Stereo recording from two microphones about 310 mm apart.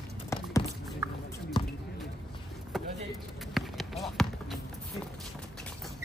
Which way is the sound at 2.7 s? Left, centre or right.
Centre.